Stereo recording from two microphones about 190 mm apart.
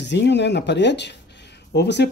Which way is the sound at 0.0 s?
65° left (ahead or behind).